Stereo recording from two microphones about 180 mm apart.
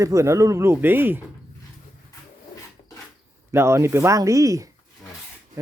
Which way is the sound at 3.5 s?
15° right (ahead or behind).